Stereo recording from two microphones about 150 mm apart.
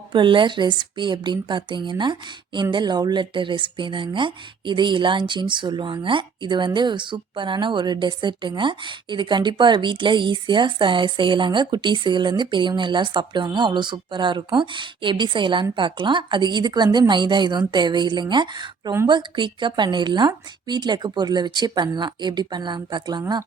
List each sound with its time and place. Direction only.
0.1 s a woman's voice: 35° right (ahead or behind)